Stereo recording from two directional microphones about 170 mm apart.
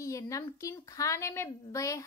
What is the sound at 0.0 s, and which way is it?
A woman's voice, 20° left (ahead or behind).